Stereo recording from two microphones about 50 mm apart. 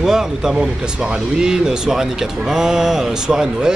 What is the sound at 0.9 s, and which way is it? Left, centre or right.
Speech, right.